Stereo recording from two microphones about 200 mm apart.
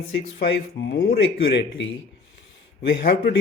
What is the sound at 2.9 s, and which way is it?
Speech, 50° left (ahead or behind).